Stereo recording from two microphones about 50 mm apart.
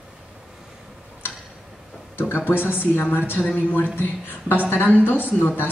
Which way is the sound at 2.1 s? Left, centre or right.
Left.